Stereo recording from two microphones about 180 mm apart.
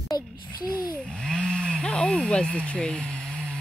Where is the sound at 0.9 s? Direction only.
5° left (ahead or behind).